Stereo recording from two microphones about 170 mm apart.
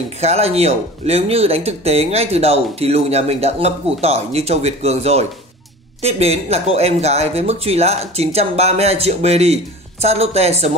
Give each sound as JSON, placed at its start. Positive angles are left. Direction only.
{"t": 0.2, "sound": "speech", "side_deg": -40}